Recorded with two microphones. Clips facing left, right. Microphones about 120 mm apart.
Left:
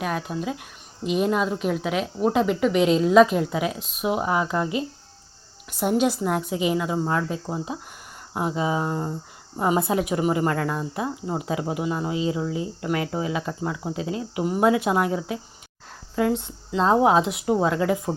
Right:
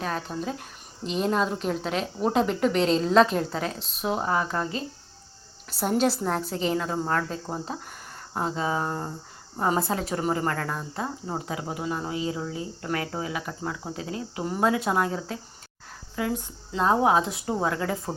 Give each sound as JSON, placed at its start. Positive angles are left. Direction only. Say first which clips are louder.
{"t": 0.0, "sound": "a woman's voice", "louder": "left 3 dB", "side_deg": 10}
{"t": 5.8, "sound": "a woman's voice", "louder": "left 2 dB", "side_deg": 5}